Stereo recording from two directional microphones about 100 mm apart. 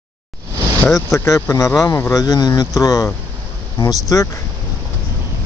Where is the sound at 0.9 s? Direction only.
30° left (ahead or behind).